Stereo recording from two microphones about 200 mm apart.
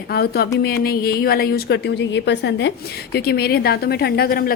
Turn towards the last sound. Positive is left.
turn(degrees=50)  # may be behind; listen again after turning